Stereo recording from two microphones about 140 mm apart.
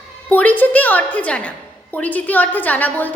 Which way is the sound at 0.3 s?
10° left (ahead or behind).